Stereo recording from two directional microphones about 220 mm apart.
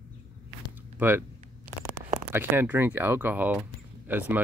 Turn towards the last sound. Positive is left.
turn(degrees=-10)  # may be behind; listen again after turning